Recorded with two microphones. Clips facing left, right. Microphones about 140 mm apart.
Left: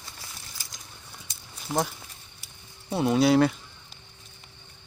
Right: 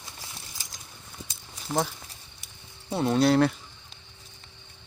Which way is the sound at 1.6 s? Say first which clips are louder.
Even; centre (ahead or behind).